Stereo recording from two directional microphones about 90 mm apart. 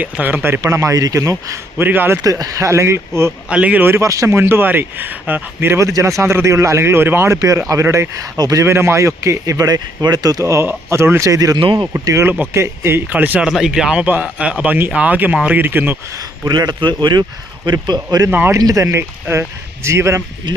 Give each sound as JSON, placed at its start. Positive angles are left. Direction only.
{"t": 0.0, "sound": "a man's voice", "side_deg": -20}
{"t": 0.6, "sound": "speech", "side_deg": -35}
{"t": 1.8, "sound": "a man's voice", "side_deg": -20}
{"t": 2.2, "sound": "speech", "side_deg": -40}
{"t": 3.5, "sound": "a man's voice", "side_deg": -15}
{"t": 7.3, "sound": "speech", "side_deg": -40}
{"t": 8.6, "sound": "speech", "side_deg": -30}
{"t": 11.5, "sound": "speech", "side_deg": -65}
{"t": 12.2, "sound": "a man's voice", "side_deg": -25}
{"t": 13.5, "sound": "a man's voice", "side_deg": -5}
{"t": 16.1, "sound": "a man's voice", "side_deg": -50}
{"t": 18.3, "sound": "a man's voice", "side_deg": -20}
{"t": 18.5, "sound": "speech", "side_deg": -40}